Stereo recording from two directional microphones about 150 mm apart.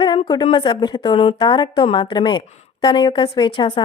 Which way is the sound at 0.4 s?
30° left (ahead or behind).